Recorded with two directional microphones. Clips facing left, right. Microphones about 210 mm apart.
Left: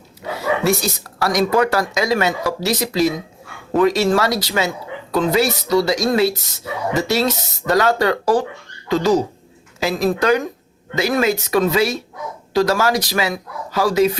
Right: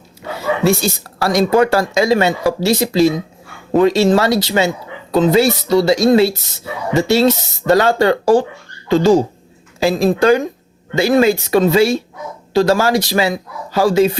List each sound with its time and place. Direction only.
0.6 s speech: 25° right (ahead or behind)